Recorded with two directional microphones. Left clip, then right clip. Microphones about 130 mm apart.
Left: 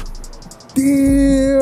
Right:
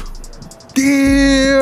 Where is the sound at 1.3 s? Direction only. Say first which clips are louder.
Right 2 dB; 25° right (ahead or behind).